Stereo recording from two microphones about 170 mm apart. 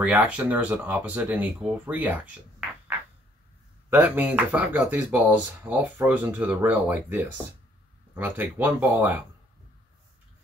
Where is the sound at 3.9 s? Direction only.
10° right (ahead or behind).